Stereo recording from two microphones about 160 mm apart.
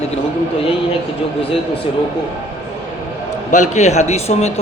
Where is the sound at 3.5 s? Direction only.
50° left (ahead or behind).